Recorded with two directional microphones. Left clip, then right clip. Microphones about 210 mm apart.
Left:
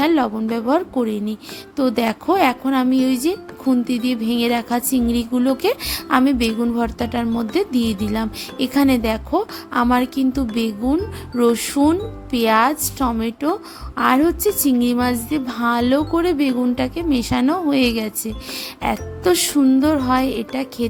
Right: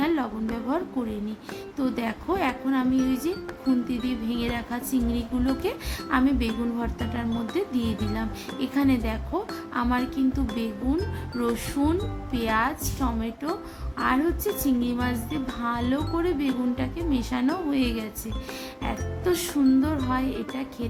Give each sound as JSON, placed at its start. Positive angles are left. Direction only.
{"t": 0.0, "sound": "speech", "side_deg": 45}